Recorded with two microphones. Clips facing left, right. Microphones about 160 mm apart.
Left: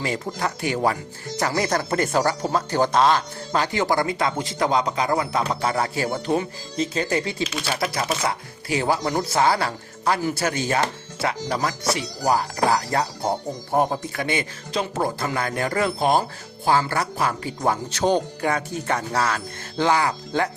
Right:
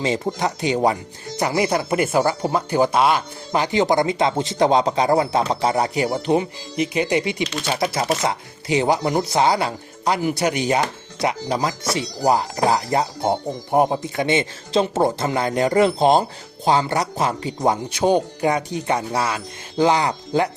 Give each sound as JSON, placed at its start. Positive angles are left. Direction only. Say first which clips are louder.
{"t": 0.0, "sound": "speech", "louder": "right 4 dB", "side_deg": -20}
{"t": 7.4, "sound": "speech", "louder": "right 2 dB", "side_deg": 5}
{"t": 7.7, "sound": "speech", "louder": "right 5 dB", "side_deg": -30}